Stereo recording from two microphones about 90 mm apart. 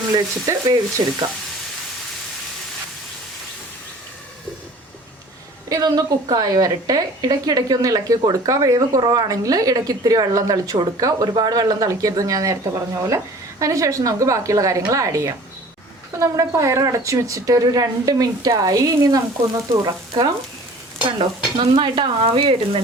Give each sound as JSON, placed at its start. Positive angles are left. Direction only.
{"t": 0.1, "sound": "a woman's voice", "side_deg": -45}
{"t": 5.6, "sound": "a woman's voice", "side_deg": -45}
{"t": 21.2, "sound": "stir", "side_deg": -65}